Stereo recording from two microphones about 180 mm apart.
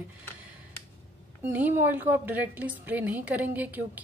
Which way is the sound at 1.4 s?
10° right (ahead or behind).